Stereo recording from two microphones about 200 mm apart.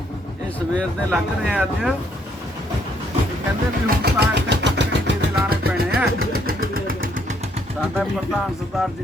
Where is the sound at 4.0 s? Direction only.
55° right (ahead or behind).